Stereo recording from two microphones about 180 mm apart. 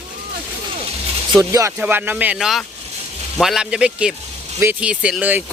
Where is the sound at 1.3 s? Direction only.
20° right (ahead or behind).